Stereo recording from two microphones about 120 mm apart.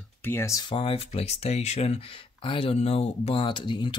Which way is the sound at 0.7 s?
50° left (ahead or behind).